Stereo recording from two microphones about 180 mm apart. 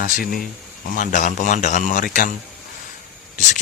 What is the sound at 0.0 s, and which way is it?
Speech, 55° left (ahead or behind).